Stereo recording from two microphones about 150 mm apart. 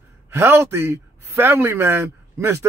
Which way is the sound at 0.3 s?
15° right (ahead or behind).